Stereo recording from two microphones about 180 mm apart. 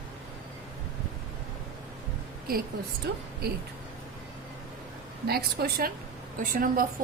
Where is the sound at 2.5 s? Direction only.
55° right (ahead or behind).